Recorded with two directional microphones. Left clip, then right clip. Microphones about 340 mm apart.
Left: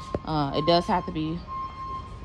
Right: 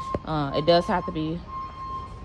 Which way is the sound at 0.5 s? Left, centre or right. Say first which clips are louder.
Right 2 dB; centre.